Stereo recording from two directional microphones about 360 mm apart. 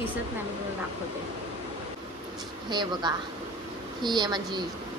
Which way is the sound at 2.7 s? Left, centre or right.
Centre.